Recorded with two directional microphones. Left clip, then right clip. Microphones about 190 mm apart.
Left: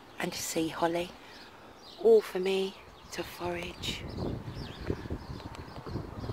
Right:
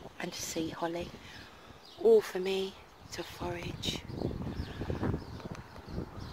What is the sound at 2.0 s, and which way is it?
Speech, 25° right (ahead or behind).